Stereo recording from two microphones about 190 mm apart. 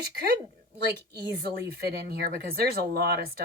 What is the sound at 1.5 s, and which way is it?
Speech, 55° right (ahead or behind).